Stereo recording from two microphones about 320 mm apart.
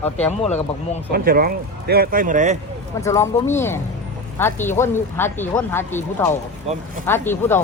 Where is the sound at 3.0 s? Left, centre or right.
Centre.